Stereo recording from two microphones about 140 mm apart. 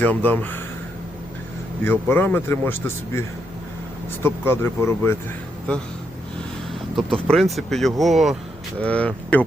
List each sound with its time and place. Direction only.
0.0 s speech: 15° left (ahead or behind)
1.8 s speech: 15° left (ahead or behind)
6.9 s speech: 5° left (ahead or behind)